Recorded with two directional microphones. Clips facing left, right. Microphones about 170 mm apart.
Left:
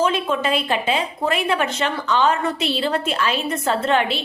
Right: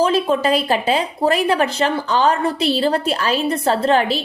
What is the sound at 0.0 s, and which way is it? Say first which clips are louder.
Speech: right 4 dB; 35° right (ahead or behind).